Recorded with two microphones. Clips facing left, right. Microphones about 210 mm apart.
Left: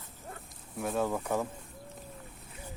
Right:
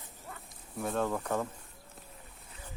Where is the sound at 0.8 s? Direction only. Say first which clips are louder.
Left 1 dB; 5° left (ahead or behind).